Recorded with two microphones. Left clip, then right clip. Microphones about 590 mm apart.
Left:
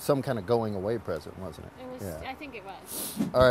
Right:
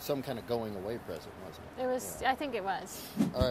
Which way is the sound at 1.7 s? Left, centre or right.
Right.